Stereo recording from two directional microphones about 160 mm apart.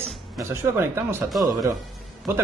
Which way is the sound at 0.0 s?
15° right (ahead or behind).